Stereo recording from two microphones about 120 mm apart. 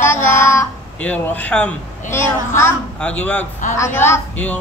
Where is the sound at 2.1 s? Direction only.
20° left (ahead or behind).